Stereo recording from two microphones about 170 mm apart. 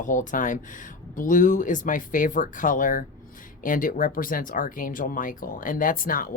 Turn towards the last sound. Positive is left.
turn(degrees=55)  # may be behind; listen again after turning